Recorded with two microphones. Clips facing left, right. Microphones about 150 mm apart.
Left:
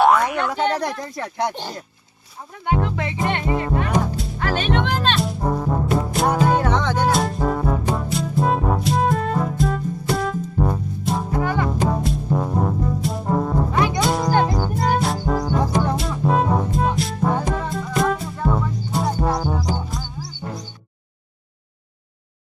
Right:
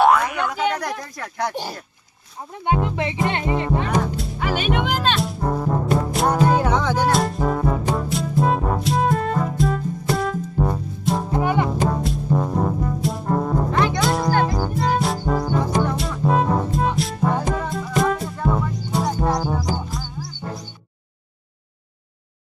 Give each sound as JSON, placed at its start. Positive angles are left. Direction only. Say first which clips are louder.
{"t": 0.0, "sound": "boing", "louder": "even", "side_deg": 0}
{"t": 0.5, "sound": "speech", "louder": "left 2 dB", "side_deg": 30}
{"t": 2.7, "sound": "speech", "louder": "left 1 dB", "side_deg": -15}
{"t": 4.2, "sound": "music", "louder": "even", "side_deg": -5}
{"t": 11.3, "sound": "music", "louder": "right 2 dB", "side_deg": -20}
{"t": 11.8, "sound": "brass instrument", "louder": "even", "side_deg": 0}
{"t": 14.4, "sound": "music", "louder": "even", "side_deg": 0}